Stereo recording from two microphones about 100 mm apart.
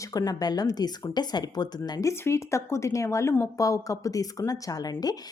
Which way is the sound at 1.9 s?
35° left (ahead or behind).